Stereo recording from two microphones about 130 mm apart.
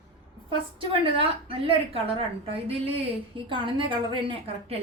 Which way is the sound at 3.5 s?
40° right (ahead or behind).